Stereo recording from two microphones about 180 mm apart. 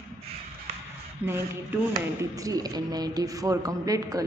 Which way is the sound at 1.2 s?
10° right (ahead or behind).